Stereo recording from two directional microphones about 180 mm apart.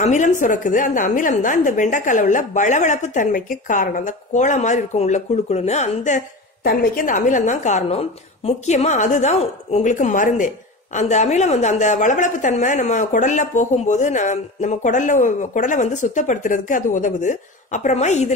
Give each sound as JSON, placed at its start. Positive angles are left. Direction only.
{"t": 0.0, "sound": "a woman's voice", "side_deg": 45}